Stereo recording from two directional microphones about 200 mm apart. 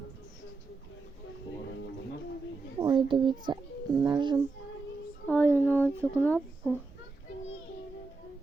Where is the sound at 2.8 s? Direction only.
25° right (ahead or behind).